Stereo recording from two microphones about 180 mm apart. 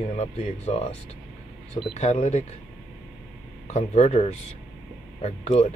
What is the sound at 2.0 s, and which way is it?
Speech, 35° left (ahead or behind).